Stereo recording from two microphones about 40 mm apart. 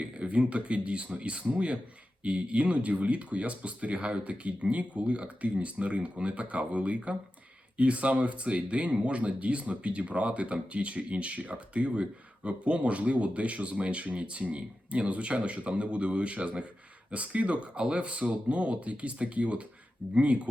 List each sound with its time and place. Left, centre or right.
0.0 s speech: right